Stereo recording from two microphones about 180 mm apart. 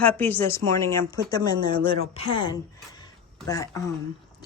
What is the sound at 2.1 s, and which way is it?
Speech, 30° left (ahead or behind).